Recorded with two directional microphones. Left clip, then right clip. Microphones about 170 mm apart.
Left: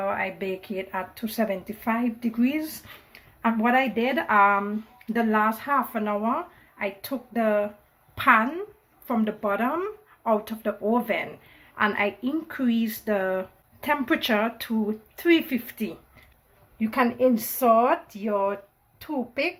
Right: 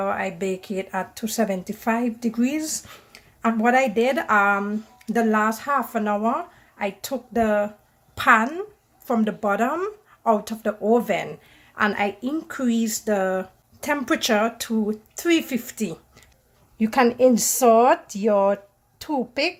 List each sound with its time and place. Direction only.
0.0 s speech: 55° right (ahead or behind)